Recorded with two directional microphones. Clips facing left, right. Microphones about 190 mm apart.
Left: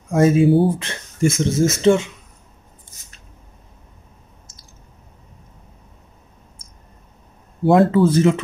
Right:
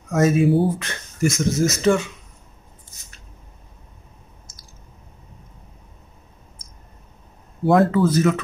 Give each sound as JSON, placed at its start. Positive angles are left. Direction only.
{"t": 0.1, "sound": "speech", "side_deg": 30}
{"t": 7.6, "sound": "speech", "side_deg": 25}